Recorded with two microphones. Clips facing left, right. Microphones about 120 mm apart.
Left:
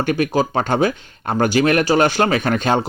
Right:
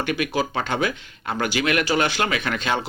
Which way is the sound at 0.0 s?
40° left (ahead or behind).